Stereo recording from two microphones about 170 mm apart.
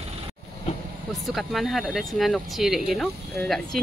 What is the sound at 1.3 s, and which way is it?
Speech, centre (ahead or behind).